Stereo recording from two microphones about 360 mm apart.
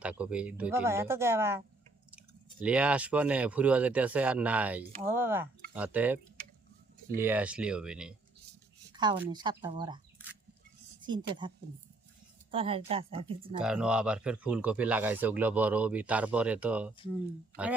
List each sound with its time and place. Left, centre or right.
0.0 s speech: centre
7.2 s speech: centre
13.6 s speech: centre